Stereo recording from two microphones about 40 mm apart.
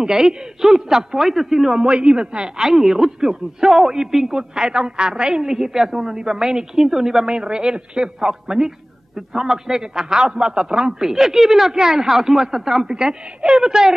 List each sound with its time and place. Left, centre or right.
0.0 s a woman's voice: centre
1.8 s a woman's voice: right